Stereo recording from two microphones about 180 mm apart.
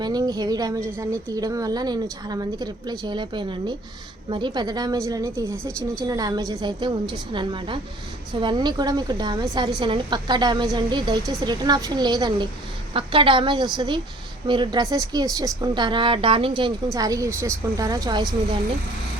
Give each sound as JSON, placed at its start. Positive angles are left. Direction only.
{"t": 0.0, "sound": "speech", "side_deg": -20}